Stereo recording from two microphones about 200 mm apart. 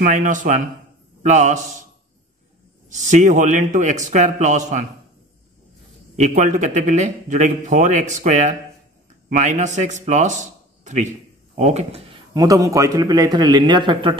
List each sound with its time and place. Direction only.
0.0 s a man's voice: 40° right (ahead or behind)
2.9 s a man's voice: 40° right (ahead or behind)
6.1 s a man's voice: 35° right (ahead or behind)
12.4 s a man's voice: 15° right (ahead or behind)